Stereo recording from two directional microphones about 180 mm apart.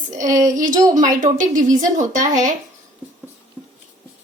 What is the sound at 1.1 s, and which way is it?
Speech, 45° right (ahead or behind).